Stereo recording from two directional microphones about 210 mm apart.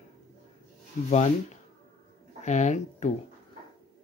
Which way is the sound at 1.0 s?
35° left (ahead or behind).